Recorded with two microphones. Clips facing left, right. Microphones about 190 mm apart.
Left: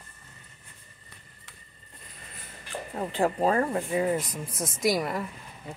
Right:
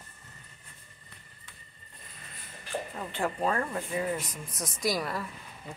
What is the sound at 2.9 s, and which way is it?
A woman's voice, 35° left (ahead or behind).